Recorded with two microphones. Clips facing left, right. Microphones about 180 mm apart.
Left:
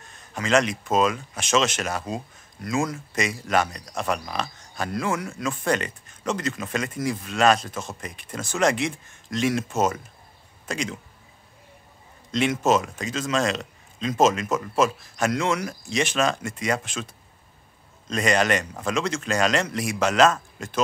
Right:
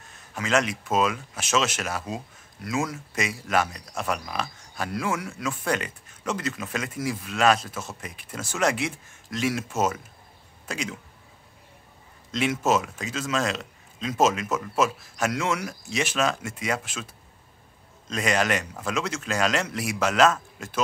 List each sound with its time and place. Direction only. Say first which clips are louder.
0.1 s a man's voice: left 3 dB; 5° right (ahead or behind)
12.3 s a man's voice: left 2 dB; 5° right (ahead or behind)
18.1 s a man's voice: left 3 dB; 5° right (ahead or behind)